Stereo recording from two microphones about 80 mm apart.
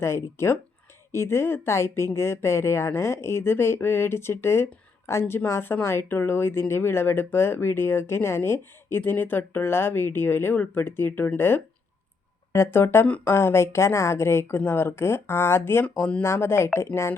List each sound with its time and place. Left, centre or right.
0.0 s speech: left; by 16.2 s centre
16.2 s speech: left